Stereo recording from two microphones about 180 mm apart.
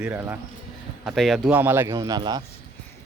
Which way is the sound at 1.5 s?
10° right (ahead or behind).